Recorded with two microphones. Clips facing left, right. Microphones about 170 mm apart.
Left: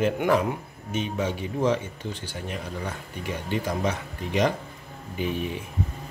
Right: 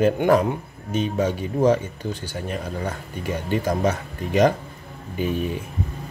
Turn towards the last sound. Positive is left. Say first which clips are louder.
# right 4 dB
turn(degrees=-45)  # may be behind; listen again after turning